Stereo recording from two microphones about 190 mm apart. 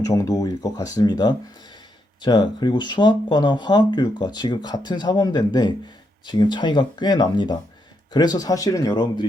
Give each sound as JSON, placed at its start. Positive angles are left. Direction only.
{"t": 0.0, "sound": "speech", "side_deg": 15}